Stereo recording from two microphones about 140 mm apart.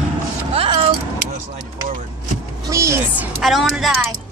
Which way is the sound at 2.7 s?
20° right (ahead or behind).